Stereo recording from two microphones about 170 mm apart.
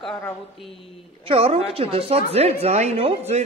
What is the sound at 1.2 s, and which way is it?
Speech, 35° right (ahead or behind).